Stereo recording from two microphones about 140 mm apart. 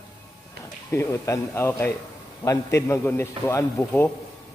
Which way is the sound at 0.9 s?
20° left (ahead or behind).